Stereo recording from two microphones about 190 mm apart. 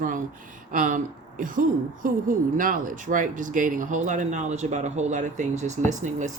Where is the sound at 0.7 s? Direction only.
45° right (ahead or behind).